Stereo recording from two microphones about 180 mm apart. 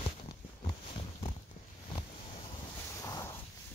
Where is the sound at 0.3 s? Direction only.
30° left (ahead or behind).